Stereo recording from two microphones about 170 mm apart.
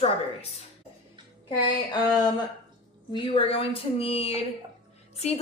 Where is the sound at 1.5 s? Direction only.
25° left (ahead or behind).